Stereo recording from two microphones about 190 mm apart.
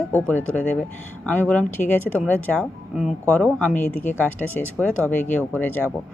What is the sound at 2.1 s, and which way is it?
A woman's voice, 5° right (ahead or behind).